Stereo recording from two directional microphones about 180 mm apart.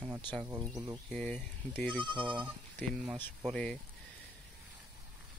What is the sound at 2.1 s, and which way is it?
Speech, 25° right (ahead or behind).